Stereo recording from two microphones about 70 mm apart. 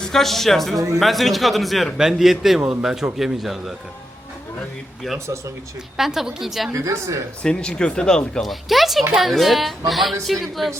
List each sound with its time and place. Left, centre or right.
0.0 s a man's voice: centre
6.0 s a man's voice: centre
6.7 s speech: right
7.4 s a man's voice: centre